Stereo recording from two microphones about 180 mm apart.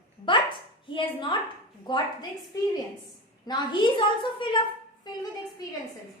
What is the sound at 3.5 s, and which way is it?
A woman's voice, 25° left (ahead or behind).